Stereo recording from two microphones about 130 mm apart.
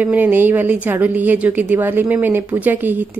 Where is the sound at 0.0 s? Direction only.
15° right (ahead or behind).